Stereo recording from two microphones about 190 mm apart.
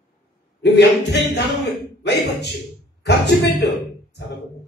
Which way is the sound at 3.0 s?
65° left (ahead or behind).